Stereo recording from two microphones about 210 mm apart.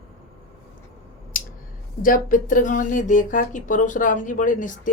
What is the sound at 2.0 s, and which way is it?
Speech, 40° left (ahead or behind).